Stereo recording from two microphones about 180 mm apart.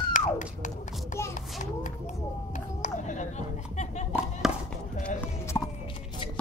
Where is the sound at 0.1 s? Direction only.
45° left (ahead or behind).